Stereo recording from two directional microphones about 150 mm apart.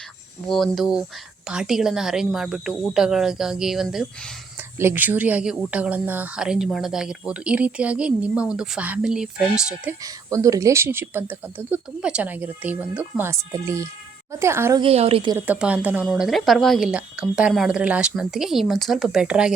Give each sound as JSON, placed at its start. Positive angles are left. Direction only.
{"t": 0.4, "sound": "a woman's voice", "side_deg": 0}
{"t": 4.8, "sound": "speech", "side_deg": -15}
{"t": 10.0, "sound": "speech", "side_deg": -20}
{"t": 14.8, "sound": "a woman's voice", "side_deg": -40}
{"t": 15.4, "sound": "a woman's voice", "side_deg": -10}